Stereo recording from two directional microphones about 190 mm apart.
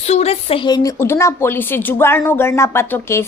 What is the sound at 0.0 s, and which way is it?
A woman's voice, 35° left (ahead or behind).